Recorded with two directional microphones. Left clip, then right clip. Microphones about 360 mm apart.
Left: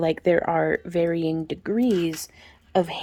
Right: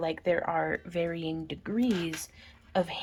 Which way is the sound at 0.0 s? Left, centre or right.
Left.